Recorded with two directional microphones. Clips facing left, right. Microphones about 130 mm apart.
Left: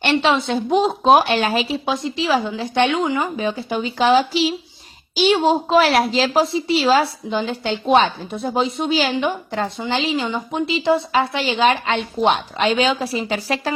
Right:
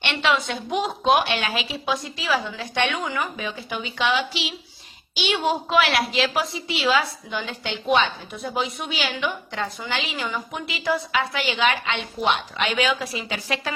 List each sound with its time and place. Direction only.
0.0 s a woman's voice: 35° left (ahead or behind)
1.9 s a woman's voice: 25° left (ahead or behind)
3.3 s a woman's voice: 35° left (ahead or behind)